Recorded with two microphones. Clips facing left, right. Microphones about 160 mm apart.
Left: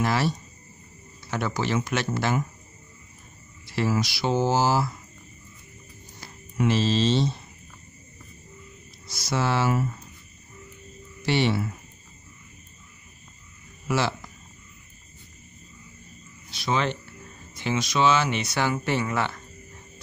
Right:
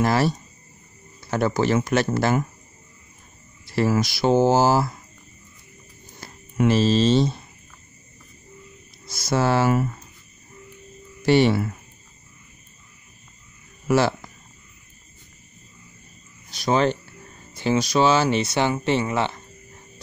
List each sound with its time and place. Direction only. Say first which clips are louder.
0.0 s speech: right 4 dB; 45° right (ahead or behind)
1.3 s speech: right 6 dB; 45° right (ahead or behind)
3.6 s speech: right 4 dB; 45° right (ahead or behind)
6.6 s speech: right 4 dB; 45° right (ahead or behind)
9.0 s speech: right 5 dB; 50° right (ahead or behind)
11.2 s speech: right 6 dB; 45° right (ahead or behind)
13.8 s speech: right 6 dB; 45° right (ahead or behind)
16.4 s speech: right 6 dB; 45° right (ahead or behind); by 19.4 s 25° right (ahead or behind)